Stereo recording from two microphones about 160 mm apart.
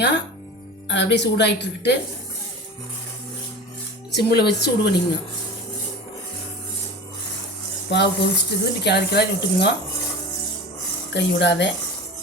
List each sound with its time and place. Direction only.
0.9 s speech: 90° left
4.1 s speech: 90° left
7.9 s speech: 90° left
11.1 s speech: 90° left